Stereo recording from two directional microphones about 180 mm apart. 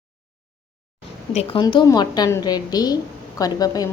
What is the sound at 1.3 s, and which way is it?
A woman's voice, 30° left (ahead or behind).